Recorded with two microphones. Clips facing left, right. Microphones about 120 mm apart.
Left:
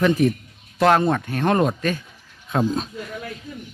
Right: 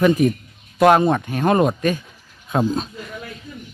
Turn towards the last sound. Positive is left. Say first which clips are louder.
# right 1 dB
turn(degrees=0)  # may be behind; listen again after turning